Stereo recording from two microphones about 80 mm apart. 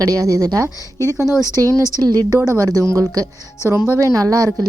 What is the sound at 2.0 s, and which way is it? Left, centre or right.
Speech, right.